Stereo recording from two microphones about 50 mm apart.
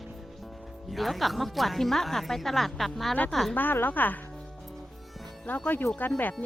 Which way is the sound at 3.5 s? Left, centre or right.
Left.